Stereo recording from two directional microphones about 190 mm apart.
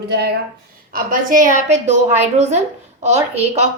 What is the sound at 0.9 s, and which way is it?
A woman's voice, 45° right (ahead or behind).